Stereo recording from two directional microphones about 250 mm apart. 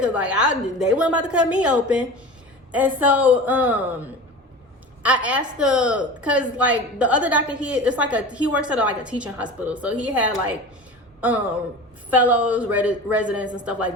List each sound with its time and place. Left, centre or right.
0.0 s a woman's voice: centre
12.1 s a woman's voice: centre